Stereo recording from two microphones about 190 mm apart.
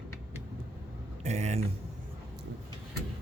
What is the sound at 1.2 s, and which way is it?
Speech, 35° right (ahead or behind).